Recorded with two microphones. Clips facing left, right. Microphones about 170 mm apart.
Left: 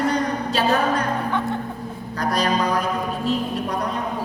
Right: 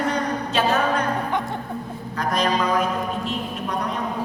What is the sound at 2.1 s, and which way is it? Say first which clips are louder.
Speech: left 1 dB; 35° left (ahead or behind).